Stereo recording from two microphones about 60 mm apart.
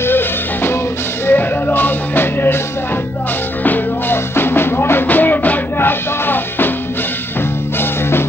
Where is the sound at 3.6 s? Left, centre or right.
Left.